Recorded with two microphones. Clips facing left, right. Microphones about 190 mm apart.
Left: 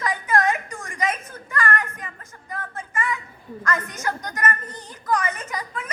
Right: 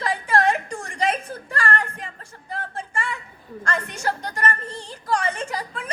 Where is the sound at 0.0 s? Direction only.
30° right (ahead or behind).